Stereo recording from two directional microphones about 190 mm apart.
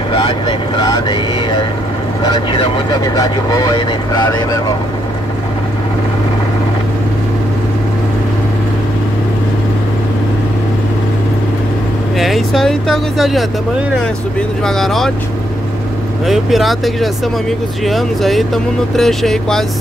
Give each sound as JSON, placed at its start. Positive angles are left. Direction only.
{"t": 0.1, "sound": "speech", "side_deg": 25}
{"t": 12.2, "sound": "speech", "side_deg": 0}
{"t": 14.6, "sound": "speech", "side_deg": 0}
{"t": 16.3, "sound": "speech", "side_deg": 0}